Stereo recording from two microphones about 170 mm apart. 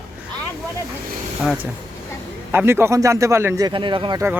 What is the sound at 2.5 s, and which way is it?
Speech, 15° right (ahead or behind).